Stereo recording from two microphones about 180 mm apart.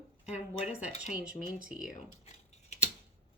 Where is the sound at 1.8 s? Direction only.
45° left (ahead or behind).